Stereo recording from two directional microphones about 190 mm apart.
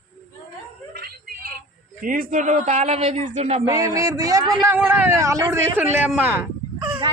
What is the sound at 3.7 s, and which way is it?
A man's voice, 20° right (ahead or behind).